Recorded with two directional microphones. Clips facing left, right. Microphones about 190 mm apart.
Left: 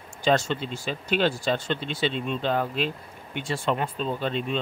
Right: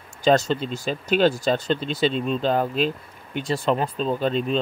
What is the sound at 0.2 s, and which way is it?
Speech, 40° right (ahead or behind).